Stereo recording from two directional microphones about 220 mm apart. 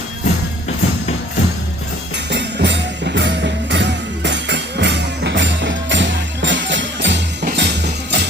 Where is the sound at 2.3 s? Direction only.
50° right (ahead or behind).